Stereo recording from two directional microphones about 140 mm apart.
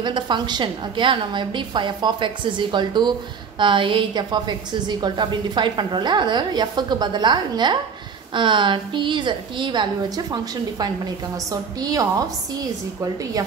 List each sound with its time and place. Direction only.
0.0 s a woman's voice: 35° right (ahead or behind)